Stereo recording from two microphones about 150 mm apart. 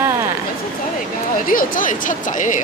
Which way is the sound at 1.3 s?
65° left (ahead or behind).